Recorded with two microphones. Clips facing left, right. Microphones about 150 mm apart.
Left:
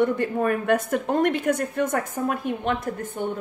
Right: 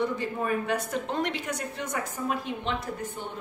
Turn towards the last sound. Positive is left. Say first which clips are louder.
# left 5 dB
turn(degrees=50)  # may be behind; listen again after turning